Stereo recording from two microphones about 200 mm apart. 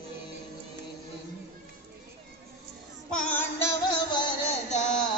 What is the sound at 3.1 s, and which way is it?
Music, 5° left (ahead or behind).